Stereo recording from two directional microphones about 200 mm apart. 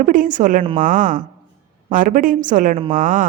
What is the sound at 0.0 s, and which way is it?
A woman's voice, 40° right (ahead or behind).